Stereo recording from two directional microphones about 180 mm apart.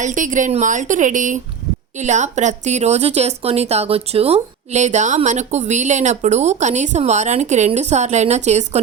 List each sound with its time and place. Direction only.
0.0 s a woman's voice: 45° right (ahead or behind)